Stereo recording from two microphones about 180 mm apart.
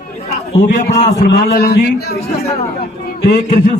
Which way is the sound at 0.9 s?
40° left (ahead or behind).